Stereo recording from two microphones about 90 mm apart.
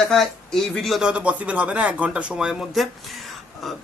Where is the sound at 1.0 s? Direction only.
15° right (ahead or behind).